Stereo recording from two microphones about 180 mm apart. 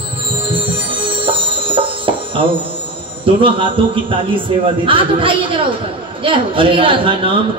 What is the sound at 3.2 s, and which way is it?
A man's voice, 30° right (ahead or behind).